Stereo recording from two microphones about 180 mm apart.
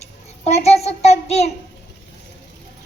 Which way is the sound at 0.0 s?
35° left (ahead or behind).